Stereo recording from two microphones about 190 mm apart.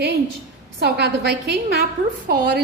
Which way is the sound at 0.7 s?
60° right (ahead or behind).